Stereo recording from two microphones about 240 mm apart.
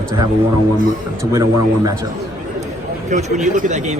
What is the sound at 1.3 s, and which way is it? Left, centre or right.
Speech, centre.